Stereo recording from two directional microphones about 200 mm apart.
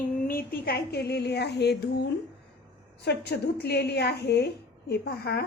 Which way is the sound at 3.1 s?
55° left (ahead or behind).